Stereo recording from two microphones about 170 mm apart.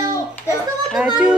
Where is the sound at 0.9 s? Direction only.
5° right (ahead or behind).